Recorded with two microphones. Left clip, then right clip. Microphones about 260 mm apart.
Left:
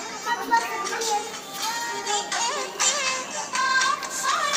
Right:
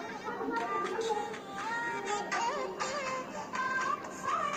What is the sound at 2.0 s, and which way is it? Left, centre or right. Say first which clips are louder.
Music: left 10 dB; centre.